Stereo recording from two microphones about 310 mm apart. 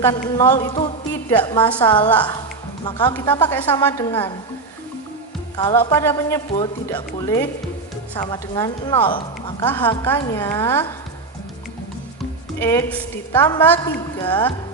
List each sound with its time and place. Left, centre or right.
0.0 s speech: centre
5.5 s speech: centre
12.5 s a woman's voice: centre